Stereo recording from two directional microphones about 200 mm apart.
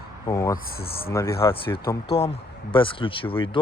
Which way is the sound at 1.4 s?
25° left (ahead or behind).